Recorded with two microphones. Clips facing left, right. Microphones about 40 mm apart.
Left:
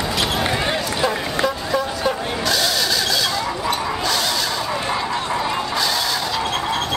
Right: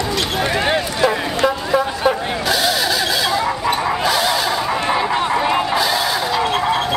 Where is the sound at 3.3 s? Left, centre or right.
Centre.